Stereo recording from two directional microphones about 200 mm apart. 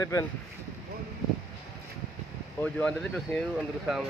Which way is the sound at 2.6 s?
5° left (ahead or behind).